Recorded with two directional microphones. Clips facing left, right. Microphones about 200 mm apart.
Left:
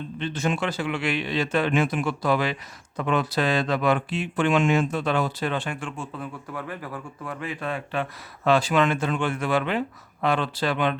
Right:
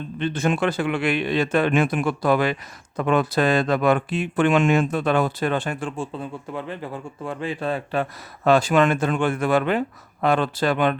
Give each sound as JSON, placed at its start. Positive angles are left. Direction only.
{"t": 0.2, "sound": "speech", "side_deg": -55}
{"t": 8.4, "sound": "speech", "side_deg": -45}